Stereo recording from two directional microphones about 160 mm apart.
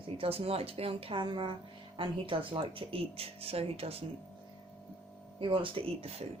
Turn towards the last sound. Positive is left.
turn(degrees=-35)  # may be behind; listen again after turning